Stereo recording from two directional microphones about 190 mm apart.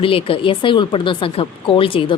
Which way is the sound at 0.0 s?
30° left (ahead or behind).